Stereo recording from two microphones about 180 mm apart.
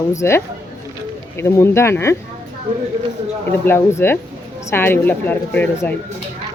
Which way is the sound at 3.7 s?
15° left (ahead or behind).